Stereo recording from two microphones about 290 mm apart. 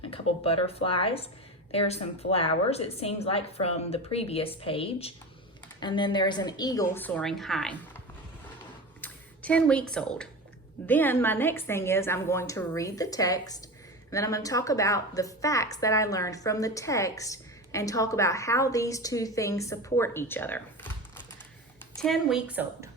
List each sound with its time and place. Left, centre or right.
0.1 s a woman's voice: centre
9.0 s a sound: centre
9.9 s a woman's voice: centre
21.9 s a woman's voice: centre